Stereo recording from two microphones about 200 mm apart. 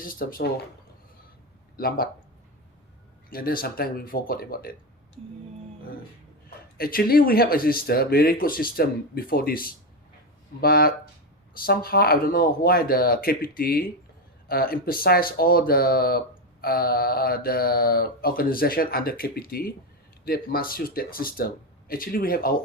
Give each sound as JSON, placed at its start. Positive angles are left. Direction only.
{"t": 0.0, "sound": "speech", "side_deg": 45}
{"t": 1.7, "sound": "speech", "side_deg": 50}
{"t": 3.2, "sound": "speech", "side_deg": 45}
{"t": 6.7, "sound": "speech", "side_deg": 45}